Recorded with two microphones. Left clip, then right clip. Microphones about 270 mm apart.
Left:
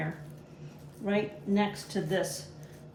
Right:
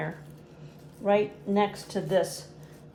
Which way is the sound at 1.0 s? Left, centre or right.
Centre.